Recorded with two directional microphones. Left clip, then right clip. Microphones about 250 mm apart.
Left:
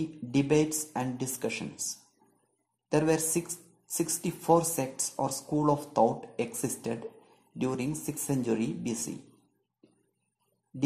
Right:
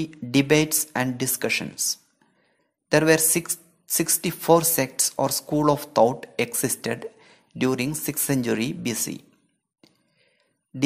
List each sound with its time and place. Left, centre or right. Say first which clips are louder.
0.0 s speech: right 7 dB; right